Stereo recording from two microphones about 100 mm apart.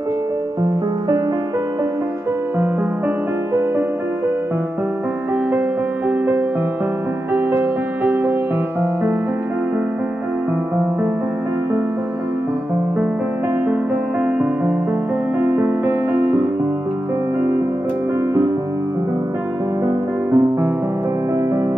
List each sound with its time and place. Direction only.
6.0 s music: 20° right (ahead or behind)
15.4 s music: 25° right (ahead or behind)
20.2 s music: 20° right (ahead or behind)